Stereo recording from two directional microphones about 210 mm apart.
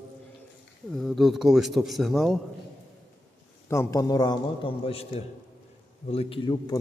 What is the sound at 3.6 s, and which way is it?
A man's voice, 15° left (ahead or behind).